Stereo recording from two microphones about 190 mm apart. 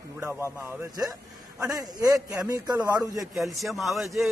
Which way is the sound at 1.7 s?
20° right (ahead or behind).